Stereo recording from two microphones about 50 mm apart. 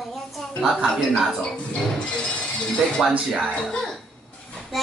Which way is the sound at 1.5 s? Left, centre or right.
Centre.